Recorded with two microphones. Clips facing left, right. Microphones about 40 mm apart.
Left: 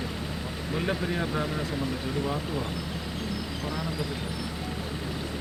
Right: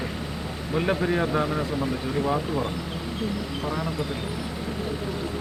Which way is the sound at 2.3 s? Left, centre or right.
Right.